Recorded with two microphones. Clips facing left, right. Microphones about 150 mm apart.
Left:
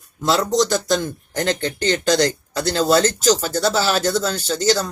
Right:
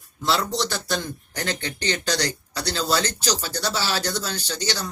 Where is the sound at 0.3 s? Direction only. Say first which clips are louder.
Left 7 dB; 45° left (ahead or behind).